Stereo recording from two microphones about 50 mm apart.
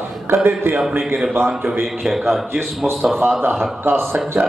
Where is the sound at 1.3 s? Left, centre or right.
Right.